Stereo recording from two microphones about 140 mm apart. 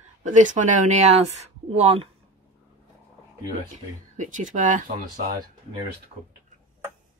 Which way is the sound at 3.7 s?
60° right (ahead or behind).